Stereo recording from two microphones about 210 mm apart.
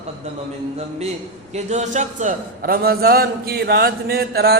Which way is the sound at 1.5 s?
35° right (ahead or behind).